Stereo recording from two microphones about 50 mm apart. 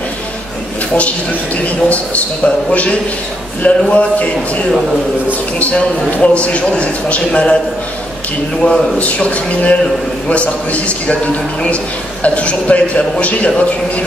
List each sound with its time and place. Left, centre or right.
1.6 s a man's voice: left
5.6 s a man's voice: left
8.6 s a man's voice: left